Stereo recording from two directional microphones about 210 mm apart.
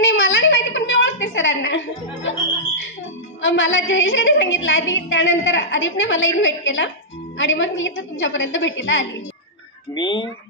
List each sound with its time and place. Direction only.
0.0 s a sound: 65° left (ahead or behind)
3.4 s a woman's voice: 65° left (ahead or behind)
9.9 s speech: 20° left (ahead or behind)